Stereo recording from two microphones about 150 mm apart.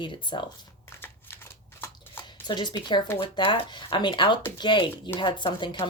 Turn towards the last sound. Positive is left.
turn(degrees=30)  # may be behind; listen again after turning